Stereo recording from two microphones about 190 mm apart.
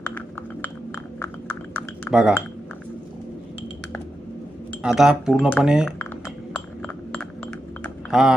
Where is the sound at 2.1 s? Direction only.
10° left (ahead or behind).